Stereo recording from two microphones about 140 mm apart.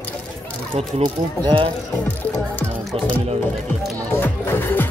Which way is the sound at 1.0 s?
35° right (ahead or behind).